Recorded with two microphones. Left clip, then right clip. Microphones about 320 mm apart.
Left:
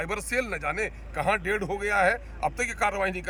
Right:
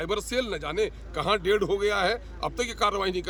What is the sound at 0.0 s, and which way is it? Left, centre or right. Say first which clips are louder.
A man's voice: right 1 dB; centre.